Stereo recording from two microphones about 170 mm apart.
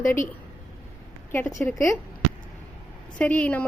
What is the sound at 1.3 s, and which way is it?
Speech, 10° left (ahead or behind).